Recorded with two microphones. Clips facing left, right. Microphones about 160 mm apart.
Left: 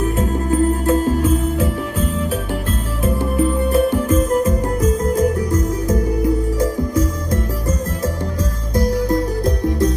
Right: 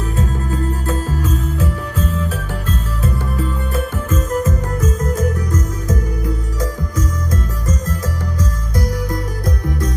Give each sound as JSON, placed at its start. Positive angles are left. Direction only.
{"t": 0.0, "sound": "music", "side_deg": 20}
{"t": 3.8, "sound": "music", "side_deg": 25}